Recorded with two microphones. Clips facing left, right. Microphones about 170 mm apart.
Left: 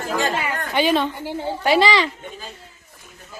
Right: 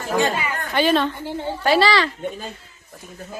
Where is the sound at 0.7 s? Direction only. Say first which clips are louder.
Right 1 dB; 15° left (ahead or behind).